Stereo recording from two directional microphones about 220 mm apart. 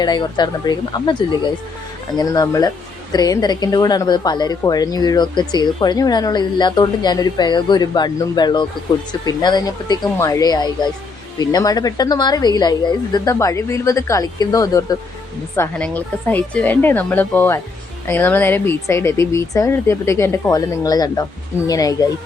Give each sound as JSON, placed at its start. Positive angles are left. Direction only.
{"t": 0.0, "sound": "a woman's voice", "side_deg": 20}